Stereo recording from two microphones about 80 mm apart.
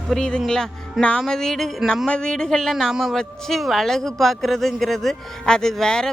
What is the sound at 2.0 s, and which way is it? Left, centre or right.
Speech, centre.